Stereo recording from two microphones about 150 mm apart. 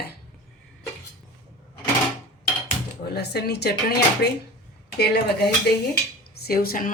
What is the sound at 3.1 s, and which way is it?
Speech, 90° left.